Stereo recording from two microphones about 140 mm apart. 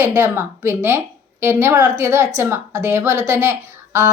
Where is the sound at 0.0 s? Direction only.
15° right (ahead or behind).